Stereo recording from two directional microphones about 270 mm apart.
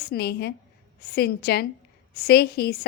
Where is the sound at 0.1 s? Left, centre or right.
Left.